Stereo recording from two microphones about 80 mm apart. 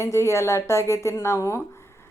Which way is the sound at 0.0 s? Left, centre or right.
Left.